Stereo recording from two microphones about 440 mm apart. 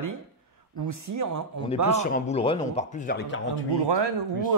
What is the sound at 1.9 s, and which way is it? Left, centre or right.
Speech, centre.